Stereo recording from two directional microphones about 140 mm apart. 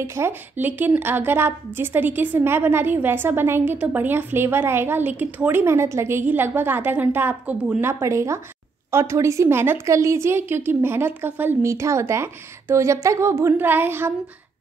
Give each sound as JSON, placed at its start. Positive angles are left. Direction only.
{"t": 0.0, "sound": "a woman's voice", "side_deg": -20}